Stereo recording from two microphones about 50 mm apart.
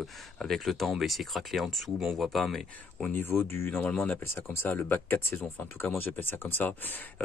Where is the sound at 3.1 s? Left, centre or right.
Left.